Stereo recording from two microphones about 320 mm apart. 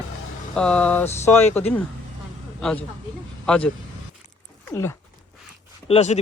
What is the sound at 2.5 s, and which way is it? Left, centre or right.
Speech, centre.